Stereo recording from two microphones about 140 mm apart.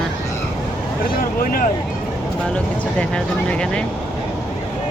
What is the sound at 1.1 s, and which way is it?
Speech, 90° left.